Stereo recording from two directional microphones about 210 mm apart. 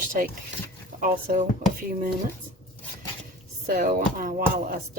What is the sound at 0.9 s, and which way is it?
Speech, 40° right (ahead or behind).